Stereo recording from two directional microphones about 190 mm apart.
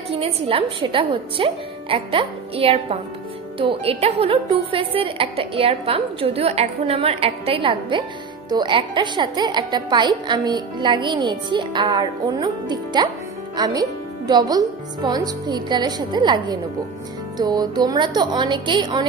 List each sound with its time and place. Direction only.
0.1 s a woman's voice: 30° right (ahead or behind)